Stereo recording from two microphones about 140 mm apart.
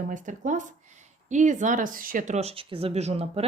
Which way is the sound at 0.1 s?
65° right (ahead or behind).